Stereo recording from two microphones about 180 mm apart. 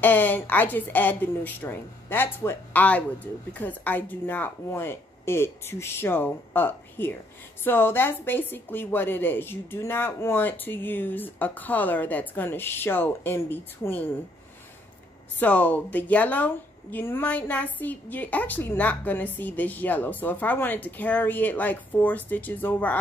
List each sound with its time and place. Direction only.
0.0 s speech: 10° left (ahead or behind)
15.3 s speech: 10° left (ahead or behind)